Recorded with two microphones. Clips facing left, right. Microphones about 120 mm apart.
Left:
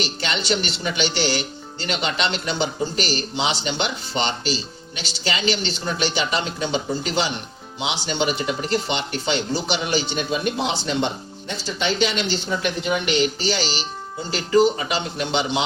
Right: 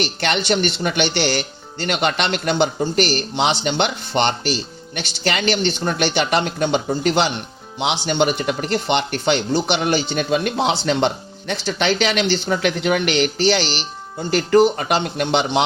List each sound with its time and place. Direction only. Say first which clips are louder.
0.0 s speech: right 5 dB; 60° right (ahead or behind)